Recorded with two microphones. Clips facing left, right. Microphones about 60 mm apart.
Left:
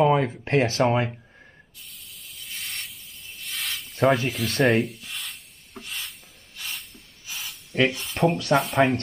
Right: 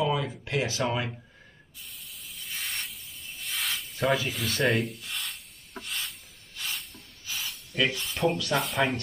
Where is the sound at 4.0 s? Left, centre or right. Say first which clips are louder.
Left 6 dB; left.